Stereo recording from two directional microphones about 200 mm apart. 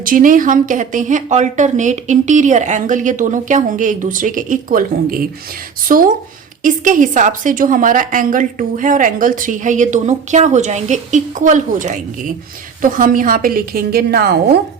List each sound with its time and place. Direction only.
0.0 s a woman's voice: 45° right (ahead or behind)